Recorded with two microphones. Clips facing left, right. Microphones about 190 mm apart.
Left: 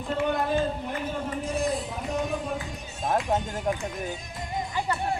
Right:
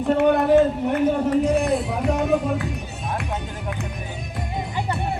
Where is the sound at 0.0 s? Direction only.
65° right (ahead or behind).